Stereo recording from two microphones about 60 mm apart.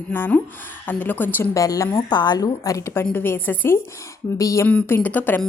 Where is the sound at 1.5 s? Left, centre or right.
Left.